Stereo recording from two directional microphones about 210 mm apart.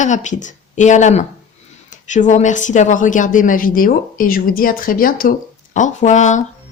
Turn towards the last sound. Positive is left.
turn(degrees=35)  # may be behind; listen again after turning